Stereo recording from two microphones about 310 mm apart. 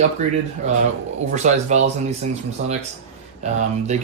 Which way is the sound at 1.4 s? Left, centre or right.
Right.